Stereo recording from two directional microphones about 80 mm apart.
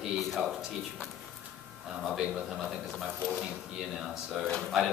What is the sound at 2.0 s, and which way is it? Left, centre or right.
Speech, centre.